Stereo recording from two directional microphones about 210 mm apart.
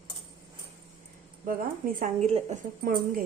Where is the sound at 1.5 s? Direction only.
45° right (ahead or behind).